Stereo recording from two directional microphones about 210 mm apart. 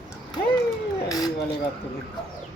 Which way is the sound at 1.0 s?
15° left (ahead or behind).